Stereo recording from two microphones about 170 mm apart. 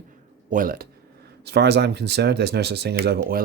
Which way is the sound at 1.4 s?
75° right (ahead or behind).